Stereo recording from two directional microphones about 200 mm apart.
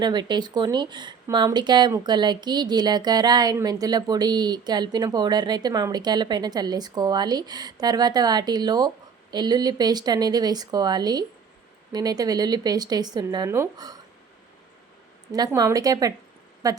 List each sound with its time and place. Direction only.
0.0 s speech: 20° right (ahead or behind)
15.3 s speech: 20° right (ahead or behind)